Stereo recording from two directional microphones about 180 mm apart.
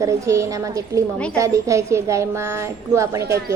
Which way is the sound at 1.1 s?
5° left (ahead or behind).